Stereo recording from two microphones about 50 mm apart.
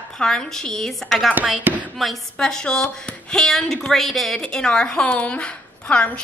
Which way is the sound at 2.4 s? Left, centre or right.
Centre.